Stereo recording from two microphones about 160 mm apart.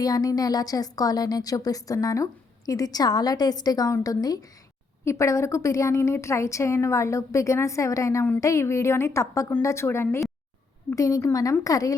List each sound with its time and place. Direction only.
0.0 s a woman's voice: 25° left (ahead or behind)